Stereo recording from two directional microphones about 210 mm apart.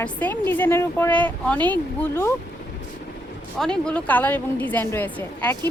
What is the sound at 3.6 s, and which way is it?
A woman's voice, 5° left (ahead or behind).